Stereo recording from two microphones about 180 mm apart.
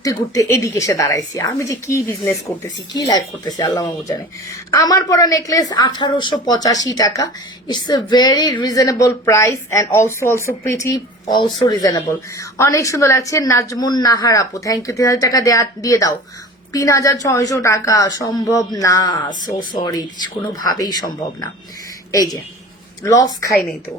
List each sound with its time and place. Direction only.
0.0 s a woman's voice: 20° left (ahead or behind)